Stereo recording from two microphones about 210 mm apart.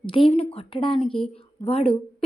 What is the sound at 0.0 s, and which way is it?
A woman's voice, 25° left (ahead or behind).